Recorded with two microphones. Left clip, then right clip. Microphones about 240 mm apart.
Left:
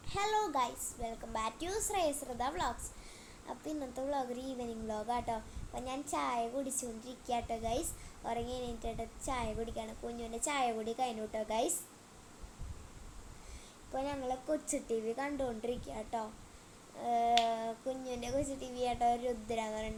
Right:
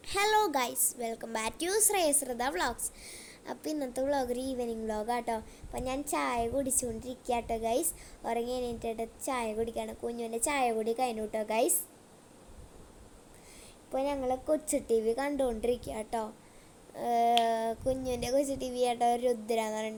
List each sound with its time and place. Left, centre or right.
0.0 s a woman's voice: right
13.9 s a woman's voice: right